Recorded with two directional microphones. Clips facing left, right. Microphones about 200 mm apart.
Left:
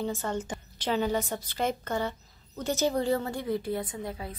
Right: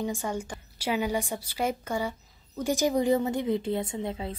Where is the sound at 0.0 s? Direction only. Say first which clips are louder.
Even; 15° right (ahead or behind).